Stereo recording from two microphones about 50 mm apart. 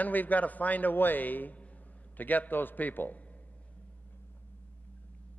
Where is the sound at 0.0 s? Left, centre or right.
Left.